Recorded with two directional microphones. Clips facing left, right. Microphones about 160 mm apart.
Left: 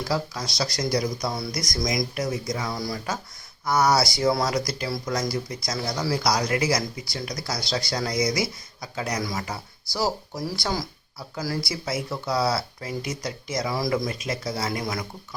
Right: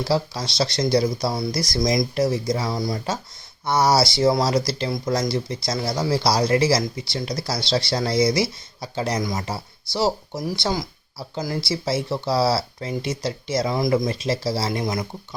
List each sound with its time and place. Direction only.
0.0 s speech: 30° right (ahead or behind)